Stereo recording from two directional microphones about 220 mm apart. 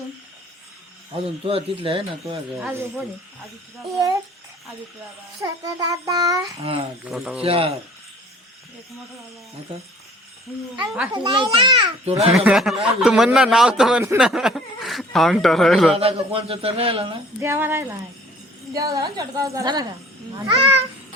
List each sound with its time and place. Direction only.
1.1 s a man's voice: 25° right (ahead or behind)
2.6 s a child's voice: 10° right (ahead or behind)
5.4 s a child's voice: 15° right (ahead or behind)
7.0 s speech: 5° right (ahead or behind)
7.4 s a man's voice: 25° right (ahead or behind)
11.1 s a man's voice: 20° right (ahead or behind)
12.3 s speech: centre (ahead or behind)
16.0 s a man's voice: 25° right (ahead or behind)
17.4 s a child's voice: 10° right (ahead or behind)